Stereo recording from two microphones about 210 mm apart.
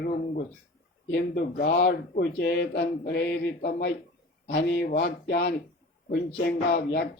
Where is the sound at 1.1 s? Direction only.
50° left (ahead or behind).